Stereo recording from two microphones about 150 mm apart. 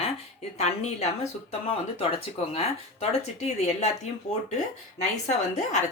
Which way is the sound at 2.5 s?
45° left (ahead or behind).